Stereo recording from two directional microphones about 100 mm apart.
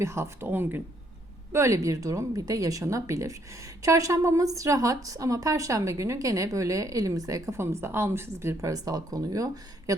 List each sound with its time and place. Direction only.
0.0 s a woman's voice: 25° right (ahead or behind)